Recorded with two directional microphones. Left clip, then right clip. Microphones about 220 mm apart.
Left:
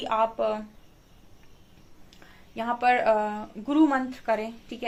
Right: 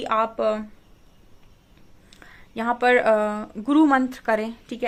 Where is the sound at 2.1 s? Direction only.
45° right (ahead or behind).